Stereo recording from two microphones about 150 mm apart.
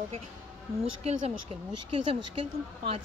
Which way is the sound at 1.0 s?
45° right (ahead or behind).